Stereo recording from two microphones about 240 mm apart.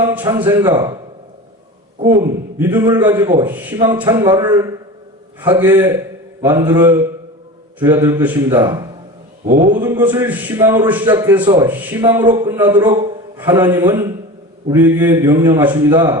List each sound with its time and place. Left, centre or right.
0.1 s a man's voice: centre
2.6 s a man's voice: centre
9.5 s a man's voice: right
9.8 s a man's voice: centre